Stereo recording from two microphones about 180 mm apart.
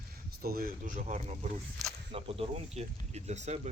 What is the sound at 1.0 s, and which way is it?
Speech, 40° right (ahead or behind).